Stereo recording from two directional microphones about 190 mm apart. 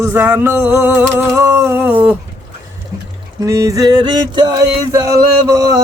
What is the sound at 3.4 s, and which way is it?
A man's voice, 15° right (ahead or behind).